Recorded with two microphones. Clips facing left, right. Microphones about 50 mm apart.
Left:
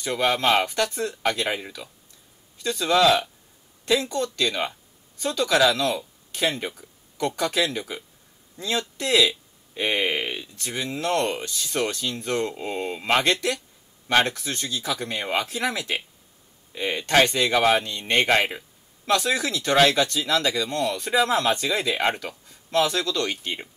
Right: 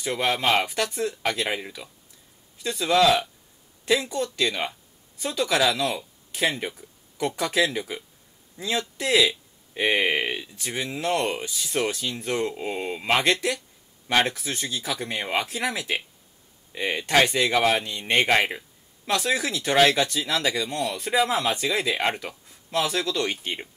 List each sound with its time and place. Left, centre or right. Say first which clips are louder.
0.0 s speech: left 2 dB; centre
22.1 s speech: left 1 dB; centre